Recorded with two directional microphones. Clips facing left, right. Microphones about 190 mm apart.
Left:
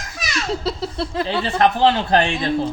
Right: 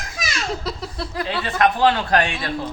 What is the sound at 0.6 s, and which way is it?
Speech, 30° left (ahead or behind).